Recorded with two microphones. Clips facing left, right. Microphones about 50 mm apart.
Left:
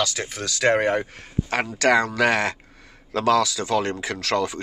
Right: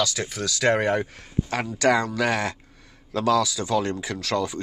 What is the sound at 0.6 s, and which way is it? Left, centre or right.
Speech, left.